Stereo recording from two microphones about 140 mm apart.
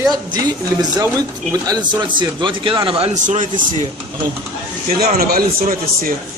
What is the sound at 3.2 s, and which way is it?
Speech, 65° right (ahead or behind).